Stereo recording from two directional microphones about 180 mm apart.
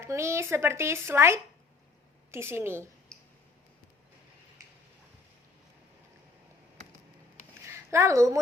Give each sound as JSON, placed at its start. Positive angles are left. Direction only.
{"t": 0.0, "sound": "speech", "side_deg": -15}
{"t": 7.7, "sound": "speech", "side_deg": -15}